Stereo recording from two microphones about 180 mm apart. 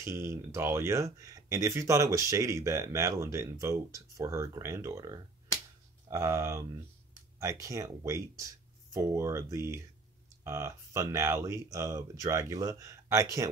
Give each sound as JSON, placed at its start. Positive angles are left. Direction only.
{"t": 0.0, "sound": "speech", "side_deg": -15}